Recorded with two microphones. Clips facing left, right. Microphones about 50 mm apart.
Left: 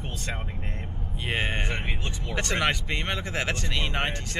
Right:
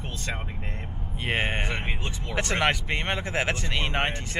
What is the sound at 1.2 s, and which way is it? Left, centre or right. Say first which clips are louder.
Speech: right 2 dB; right.